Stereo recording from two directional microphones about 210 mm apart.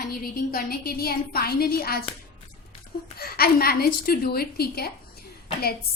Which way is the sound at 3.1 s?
45° left (ahead or behind).